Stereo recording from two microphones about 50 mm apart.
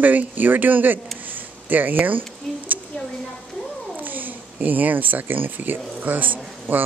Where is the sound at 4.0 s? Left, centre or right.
Right.